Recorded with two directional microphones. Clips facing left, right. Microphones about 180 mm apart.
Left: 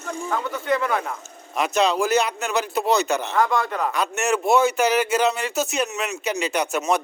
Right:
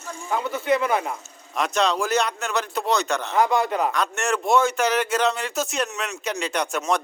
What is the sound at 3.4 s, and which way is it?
Speech, 20° right (ahead or behind).